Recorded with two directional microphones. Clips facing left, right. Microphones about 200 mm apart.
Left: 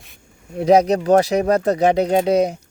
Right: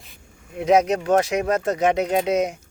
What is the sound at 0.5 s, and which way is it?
Speech, 35° left (ahead or behind).